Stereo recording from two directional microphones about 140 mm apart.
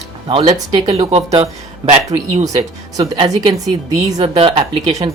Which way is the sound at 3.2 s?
30° right (ahead or behind).